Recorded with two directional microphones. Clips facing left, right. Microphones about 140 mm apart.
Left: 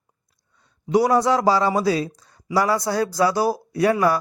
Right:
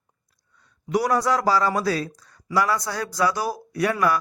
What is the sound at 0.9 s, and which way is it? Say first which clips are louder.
Speech: left 4 dB; 25° left (ahead or behind).